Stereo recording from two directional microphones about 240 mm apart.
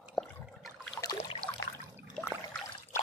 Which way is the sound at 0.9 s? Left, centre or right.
Centre.